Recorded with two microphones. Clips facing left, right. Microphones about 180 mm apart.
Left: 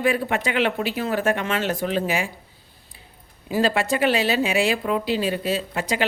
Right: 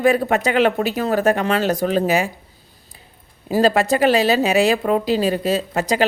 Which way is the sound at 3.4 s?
40° right (ahead or behind).